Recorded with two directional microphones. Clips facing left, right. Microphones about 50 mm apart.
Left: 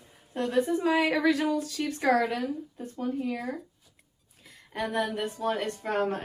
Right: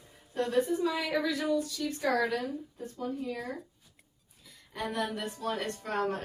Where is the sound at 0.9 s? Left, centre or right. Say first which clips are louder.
Left 6 dB; left.